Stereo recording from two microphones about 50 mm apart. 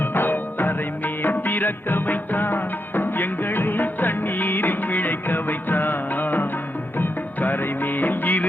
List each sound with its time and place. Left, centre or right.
0.0 s music: left